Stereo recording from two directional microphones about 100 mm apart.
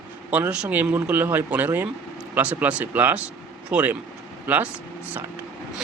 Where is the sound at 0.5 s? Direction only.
15° right (ahead or behind).